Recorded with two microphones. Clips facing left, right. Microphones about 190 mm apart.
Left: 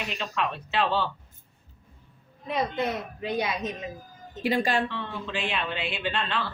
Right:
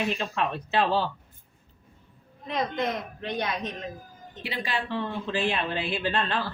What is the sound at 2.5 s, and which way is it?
A woman's voice, 5° left (ahead or behind).